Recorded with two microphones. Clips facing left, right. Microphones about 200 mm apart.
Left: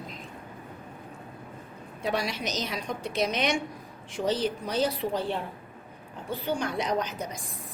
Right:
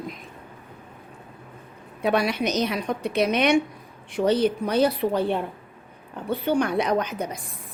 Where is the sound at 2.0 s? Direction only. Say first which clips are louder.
Right 7 dB; 60° right (ahead or behind).